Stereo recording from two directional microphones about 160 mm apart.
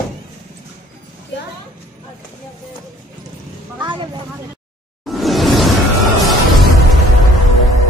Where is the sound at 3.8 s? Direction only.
30° right (ahead or behind).